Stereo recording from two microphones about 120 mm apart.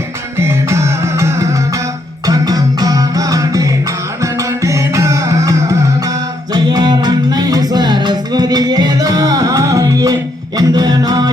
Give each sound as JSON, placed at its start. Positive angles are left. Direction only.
{"t": 0.3, "sound": "music", "side_deg": -25}